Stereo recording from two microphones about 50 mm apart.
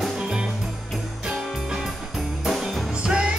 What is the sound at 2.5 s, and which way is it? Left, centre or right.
Music, centre.